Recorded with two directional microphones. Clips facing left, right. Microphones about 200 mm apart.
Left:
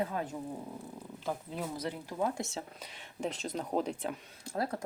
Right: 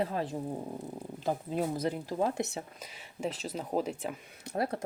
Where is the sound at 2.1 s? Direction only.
25° right (ahead or behind).